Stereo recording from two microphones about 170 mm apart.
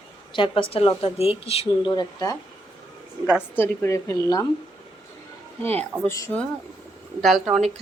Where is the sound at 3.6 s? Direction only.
15° left (ahead or behind).